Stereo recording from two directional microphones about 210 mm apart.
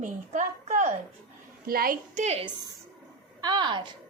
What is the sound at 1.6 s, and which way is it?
Speech, 45° right (ahead or behind).